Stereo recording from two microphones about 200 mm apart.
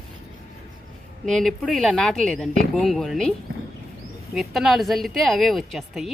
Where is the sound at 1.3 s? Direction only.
Centre (ahead or behind).